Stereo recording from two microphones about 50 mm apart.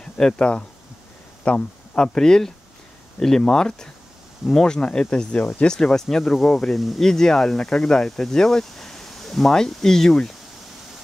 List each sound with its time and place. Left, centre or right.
0.0 s speech: centre